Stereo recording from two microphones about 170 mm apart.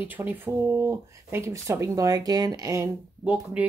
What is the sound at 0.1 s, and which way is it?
Speech, 10° right (ahead or behind).